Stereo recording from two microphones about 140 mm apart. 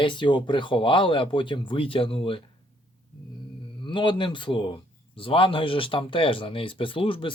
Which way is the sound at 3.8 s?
35° left (ahead or behind).